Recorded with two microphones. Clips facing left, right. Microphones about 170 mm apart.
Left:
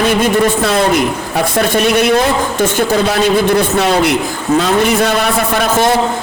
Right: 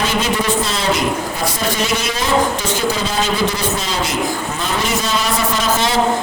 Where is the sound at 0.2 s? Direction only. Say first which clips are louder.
Left 6 dB; 55° left (ahead or behind).